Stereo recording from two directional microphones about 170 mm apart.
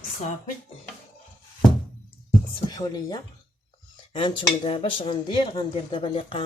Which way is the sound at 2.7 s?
20° left (ahead or behind).